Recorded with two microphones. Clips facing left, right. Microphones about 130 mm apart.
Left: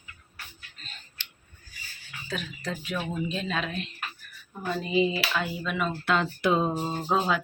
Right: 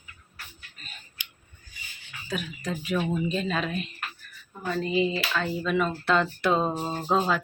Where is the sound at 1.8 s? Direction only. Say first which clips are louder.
Left 1 dB; 20° right (ahead or behind).